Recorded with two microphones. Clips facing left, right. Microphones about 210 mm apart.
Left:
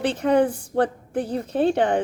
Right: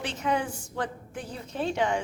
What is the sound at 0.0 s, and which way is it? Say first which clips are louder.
Speech: left 10 dB; 60° left (ahead or behind).